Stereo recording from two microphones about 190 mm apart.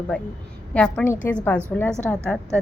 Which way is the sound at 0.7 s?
5° left (ahead or behind).